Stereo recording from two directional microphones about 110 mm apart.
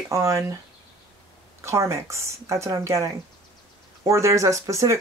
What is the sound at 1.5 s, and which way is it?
Speech, 25° right (ahead or behind).